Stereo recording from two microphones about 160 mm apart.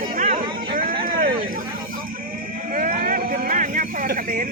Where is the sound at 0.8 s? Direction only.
60° right (ahead or behind).